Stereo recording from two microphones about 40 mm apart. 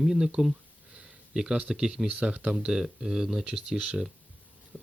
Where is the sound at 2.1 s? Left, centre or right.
Right.